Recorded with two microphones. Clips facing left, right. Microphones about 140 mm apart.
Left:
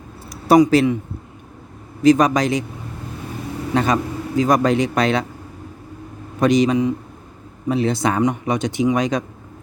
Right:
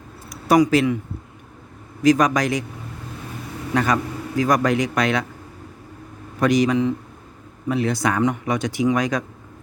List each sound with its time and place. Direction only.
0.3 s speech: 30° left (ahead or behind)
2.0 s speech: 25° left (ahead or behind)
3.8 s speech: 20° left (ahead or behind)
6.4 s speech: 20° left (ahead or behind)